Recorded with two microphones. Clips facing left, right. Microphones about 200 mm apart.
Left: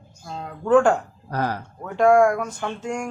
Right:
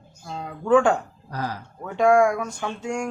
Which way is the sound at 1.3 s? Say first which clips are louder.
Left 5 dB; 60° left (ahead or behind).